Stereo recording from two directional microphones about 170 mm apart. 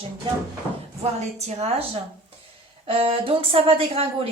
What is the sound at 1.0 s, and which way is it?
Speech, 40° right (ahead or behind).